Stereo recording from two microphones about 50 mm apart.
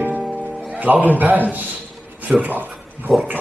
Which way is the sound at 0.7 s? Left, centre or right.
Right.